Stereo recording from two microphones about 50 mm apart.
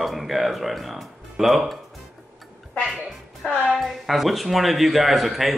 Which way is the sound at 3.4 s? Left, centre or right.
Left.